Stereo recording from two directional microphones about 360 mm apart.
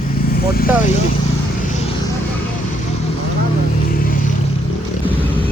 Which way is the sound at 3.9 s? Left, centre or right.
Left.